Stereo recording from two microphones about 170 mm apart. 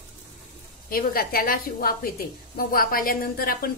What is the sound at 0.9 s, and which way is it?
A woman's voice, 60° left (ahead or behind).